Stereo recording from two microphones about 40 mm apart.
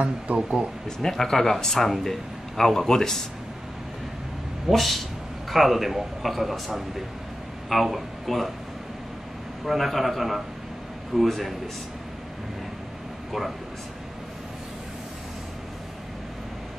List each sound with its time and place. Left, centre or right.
0.3 s speech: right
0.8 s a man's voice: centre
4.6 s a man's voice: centre
9.7 s a man's voice: centre